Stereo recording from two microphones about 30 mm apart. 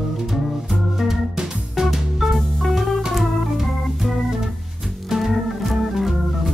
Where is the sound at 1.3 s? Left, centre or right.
Centre.